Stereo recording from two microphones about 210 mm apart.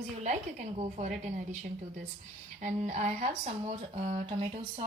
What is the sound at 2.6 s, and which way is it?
Speech, 35° right (ahead or behind).